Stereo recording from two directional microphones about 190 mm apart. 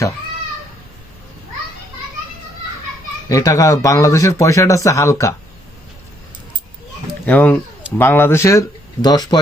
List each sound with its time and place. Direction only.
3.2 s speech: 20° left (ahead or behind)
7.3 s speech: 10° left (ahead or behind)